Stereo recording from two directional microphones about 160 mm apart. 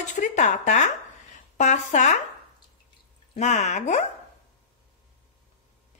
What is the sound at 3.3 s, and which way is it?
Speech, 45° left (ahead or behind).